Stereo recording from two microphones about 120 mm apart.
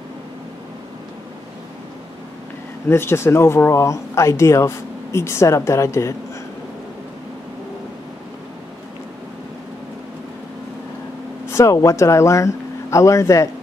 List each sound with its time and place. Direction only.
2.9 s speech: 20° left (ahead or behind)
11.4 s speech: 25° left (ahead or behind)